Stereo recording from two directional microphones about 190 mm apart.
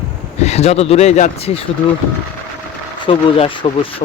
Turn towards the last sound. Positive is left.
turn(degrees=30)  # may be behind; listen again after turning